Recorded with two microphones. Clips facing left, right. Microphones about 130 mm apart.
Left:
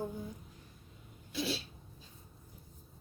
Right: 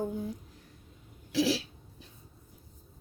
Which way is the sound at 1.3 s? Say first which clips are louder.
Right 9 dB; 90° right.